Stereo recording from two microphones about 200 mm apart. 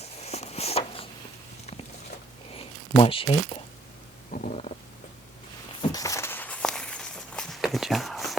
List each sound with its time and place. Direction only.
0.0 s a sound: 30° left (ahead or behind)
2.6 s speech: 25° left (ahead or behind)
4.3 s stomach rumble: 40° left (ahead or behind)
5.9 s walk: 15° left (ahead or behind); by 8.4 s centre (ahead or behind)